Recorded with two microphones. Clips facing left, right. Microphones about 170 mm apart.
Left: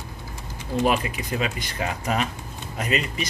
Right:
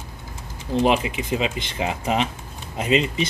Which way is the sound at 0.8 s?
20° right (ahead or behind).